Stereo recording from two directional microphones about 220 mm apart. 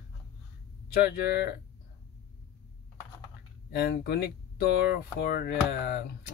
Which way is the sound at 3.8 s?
50° left (ahead or behind).